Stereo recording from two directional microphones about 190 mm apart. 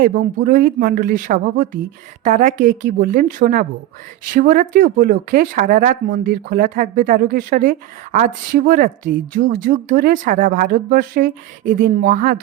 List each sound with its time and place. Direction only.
0.0 s speech: 45° right (ahead or behind)